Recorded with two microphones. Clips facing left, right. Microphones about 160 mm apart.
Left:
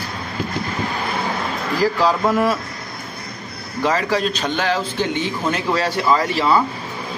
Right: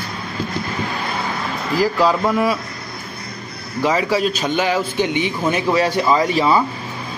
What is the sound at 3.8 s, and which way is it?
A man's voice, 10° right (ahead or behind).